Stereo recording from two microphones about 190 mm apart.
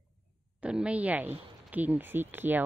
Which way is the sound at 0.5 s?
5° right (ahead or behind).